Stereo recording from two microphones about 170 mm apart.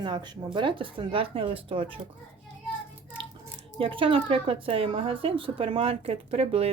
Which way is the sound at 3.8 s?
30° right (ahead or behind).